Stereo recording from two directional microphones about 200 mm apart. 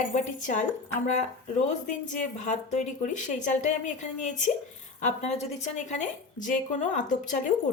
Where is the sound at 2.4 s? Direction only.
35° left (ahead or behind).